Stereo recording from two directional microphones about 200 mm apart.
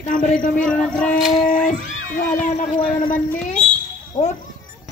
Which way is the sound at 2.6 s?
25° left (ahead or behind).